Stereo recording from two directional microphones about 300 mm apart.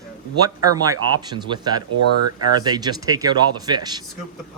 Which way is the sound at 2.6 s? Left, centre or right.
Centre.